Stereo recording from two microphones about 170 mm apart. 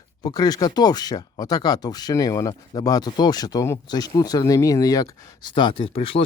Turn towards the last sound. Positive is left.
turn(degrees=35)  # may be behind; listen again after turning